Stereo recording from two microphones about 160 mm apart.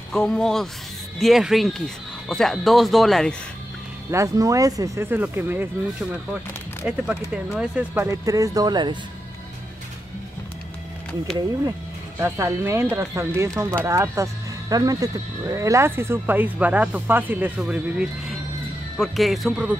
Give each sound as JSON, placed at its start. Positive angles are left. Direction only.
{"t": 0.1, "sound": "speech", "side_deg": 5}
{"t": 4.1, "sound": "speech", "side_deg": -20}
{"t": 7.4, "sound": "speech", "side_deg": -10}
{"t": 11.3, "sound": "speech", "side_deg": 5}
{"t": 12.2, "sound": "speech", "side_deg": -15}